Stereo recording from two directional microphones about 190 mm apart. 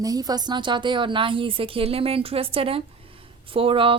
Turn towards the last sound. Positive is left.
turn(degrees=-30)  # may be behind; listen again after turning